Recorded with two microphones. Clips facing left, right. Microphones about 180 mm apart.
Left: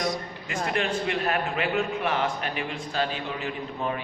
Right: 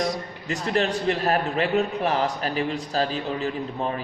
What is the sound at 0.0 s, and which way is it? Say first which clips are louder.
A man's voice: right 2 dB; 35° right (ahead or behind).